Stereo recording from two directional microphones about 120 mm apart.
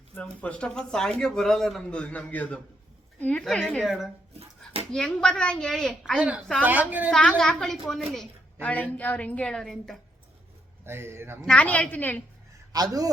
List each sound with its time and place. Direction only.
0.1 s speech: 10° left (ahead or behind)
3.4 s a child's voice: centre (ahead or behind)
4.4 s dog: 55° right (ahead or behind)
4.9 s a child's voice: 5° left (ahead or behind)
6.1 s a woman's voice: 10° right (ahead or behind)
7.1 s a child's voice: 5° left (ahead or behind)
8.6 s speech: 15° left (ahead or behind)
10.8 s speech: 20° right (ahead or behind)
11.4 s speech: 10° left (ahead or behind)
12.7 s a man's voice: 30° right (ahead or behind)